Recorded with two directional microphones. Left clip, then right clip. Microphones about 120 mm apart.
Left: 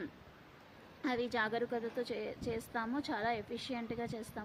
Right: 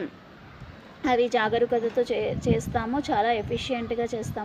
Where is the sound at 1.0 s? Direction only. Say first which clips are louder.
Right 13 dB; 30° left (ahead or behind).